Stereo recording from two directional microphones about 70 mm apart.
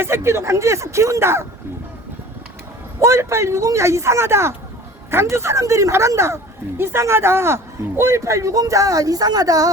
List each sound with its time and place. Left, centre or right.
0.0 s speech: right
3.0 s speech: right